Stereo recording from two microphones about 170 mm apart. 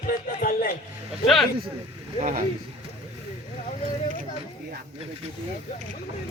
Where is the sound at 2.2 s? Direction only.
50° right (ahead or behind).